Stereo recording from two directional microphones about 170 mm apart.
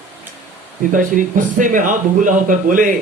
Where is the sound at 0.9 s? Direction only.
50° right (ahead or behind).